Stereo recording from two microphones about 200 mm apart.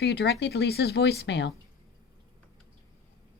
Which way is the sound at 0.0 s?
55° left (ahead or behind).